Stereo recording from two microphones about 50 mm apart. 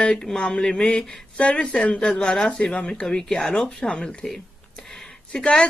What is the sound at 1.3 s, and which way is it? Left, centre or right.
Speech, left.